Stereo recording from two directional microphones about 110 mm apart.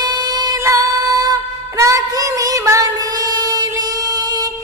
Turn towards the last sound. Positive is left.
turn(degrees=-35)  # may be behind; listen again after turning